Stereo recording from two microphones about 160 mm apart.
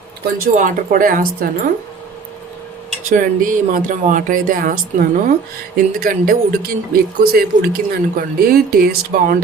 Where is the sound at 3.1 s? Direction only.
55° right (ahead or behind).